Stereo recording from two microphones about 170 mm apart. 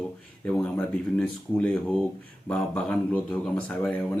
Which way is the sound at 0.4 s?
10° left (ahead or behind).